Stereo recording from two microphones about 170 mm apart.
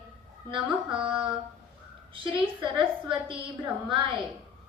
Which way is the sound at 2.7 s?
30° right (ahead or behind).